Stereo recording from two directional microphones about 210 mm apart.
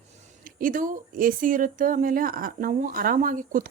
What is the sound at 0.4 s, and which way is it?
A woman's voice, 40° right (ahead or behind).